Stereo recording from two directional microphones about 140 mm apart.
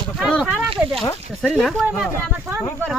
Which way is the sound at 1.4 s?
5° left (ahead or behind).